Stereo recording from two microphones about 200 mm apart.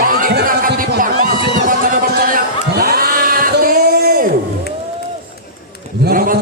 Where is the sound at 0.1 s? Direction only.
45° right (ahead or behind).